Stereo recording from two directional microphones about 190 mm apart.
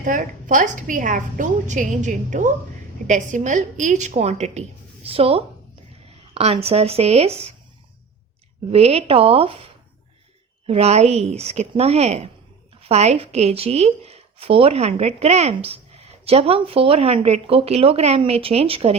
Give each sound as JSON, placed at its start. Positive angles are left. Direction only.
{"t": 0.0, "sound": "a woman's voice", "side_deg": -45}
{"t": 8.7, "sound": "a woman's voice", "side_deg": -35}
{"t": 10.7, "sound": "a woman's voice", "side_deg": -35}